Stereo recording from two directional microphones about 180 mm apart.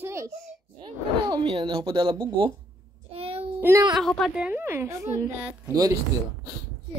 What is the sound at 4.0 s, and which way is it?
A woman's voice, centre (ahead or behind).